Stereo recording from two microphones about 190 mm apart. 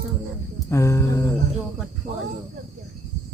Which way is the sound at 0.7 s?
15° left (ahead or behind).